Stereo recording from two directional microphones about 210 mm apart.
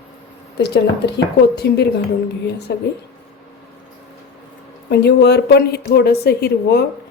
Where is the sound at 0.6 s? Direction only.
55° left (ahead or behind).